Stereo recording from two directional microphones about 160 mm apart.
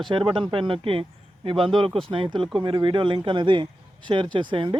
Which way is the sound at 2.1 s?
35° right (ahead or behind).